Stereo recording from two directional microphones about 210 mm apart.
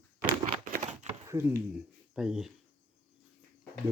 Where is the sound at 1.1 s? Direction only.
10° right (ahead or behind).